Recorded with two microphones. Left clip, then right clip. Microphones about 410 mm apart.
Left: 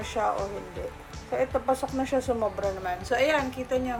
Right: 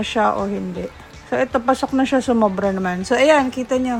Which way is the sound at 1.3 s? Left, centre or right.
Right.